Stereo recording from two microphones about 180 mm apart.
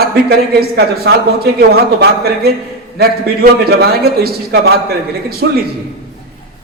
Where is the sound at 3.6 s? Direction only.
60° right (ahead or behind).